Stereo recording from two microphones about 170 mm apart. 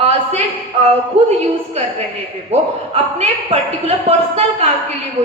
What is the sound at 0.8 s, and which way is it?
A woman's voice, 40° right (ahead or behind).